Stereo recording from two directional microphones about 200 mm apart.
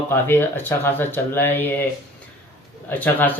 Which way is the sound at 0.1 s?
10° left (ahead or behind).